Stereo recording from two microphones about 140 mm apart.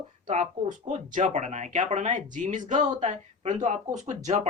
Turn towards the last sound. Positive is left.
turn(degrees=-55)  # may be behind; listen again after turning